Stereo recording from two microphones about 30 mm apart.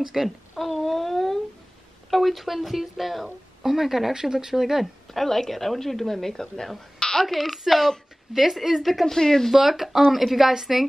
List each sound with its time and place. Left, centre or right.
0.0 s speech: centre
0.6 s a sound: centre
2.0 s speech: centre
4.1 s speech: right
5.1 s a woman's voice: centre
7.0 s a sound: left
7.2 s a woman's voice: centre
9.0 s a woman's voice: centre
9.5 s a woman's voice: centre